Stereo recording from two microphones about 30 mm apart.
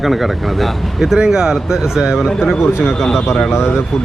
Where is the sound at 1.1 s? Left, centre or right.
Right.